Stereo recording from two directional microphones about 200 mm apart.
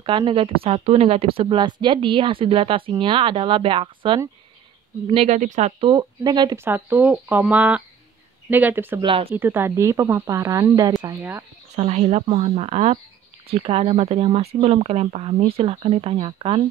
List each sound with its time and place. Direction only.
0.0 s speech: 25° right (ahead or behind); by 9.0 s 10° right (ahead or behind)
9.0 s speech: 25° right (ahead or behind)
9.3 s speech: 10° right (ahead or behind)
11.7 s speech: 35° right (ahead or behind)